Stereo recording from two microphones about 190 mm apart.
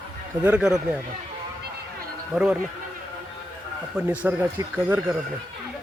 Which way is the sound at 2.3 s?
5° right (ahead or behind).